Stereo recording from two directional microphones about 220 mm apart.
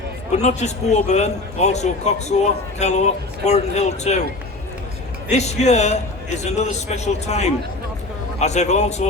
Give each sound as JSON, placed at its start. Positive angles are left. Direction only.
{"t": 0.3, "sound": "a man's voice", "side_deg": 30}
{"t": 5.3, "sound": "a man's voice", "side_deg": 30}